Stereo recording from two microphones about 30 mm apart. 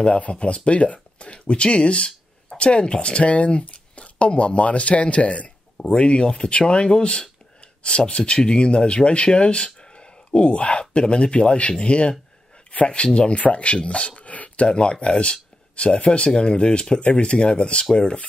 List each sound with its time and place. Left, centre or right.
0.3 s speech: left
5.9 s speech: left
14.1 s a sound: left
14.7 s speech: left